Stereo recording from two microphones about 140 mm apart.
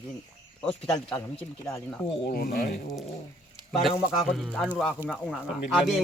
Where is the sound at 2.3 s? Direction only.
90° left.